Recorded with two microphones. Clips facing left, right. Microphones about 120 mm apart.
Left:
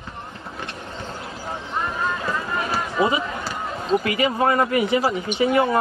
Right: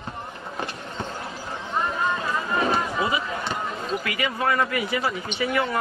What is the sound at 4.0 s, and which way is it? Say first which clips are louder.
Speech: left 6 dB; 30° left (ahead or behind).